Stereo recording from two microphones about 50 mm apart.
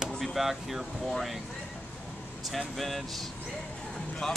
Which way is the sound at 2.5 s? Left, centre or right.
Centre.